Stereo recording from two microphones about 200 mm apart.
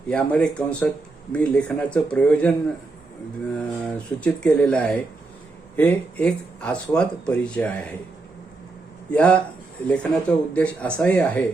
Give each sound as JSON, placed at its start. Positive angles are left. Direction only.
{"t": 0.1, "sound": "speech", "side_deg": 5}
{"t": 3.8, "sound": "speech", "side_deg": 5}
{"t": 9.0, "sound": "speech", "side_deg": 5}